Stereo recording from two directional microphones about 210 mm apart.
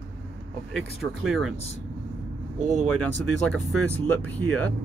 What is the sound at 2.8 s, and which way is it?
Speech, 5° left (ahead or behind).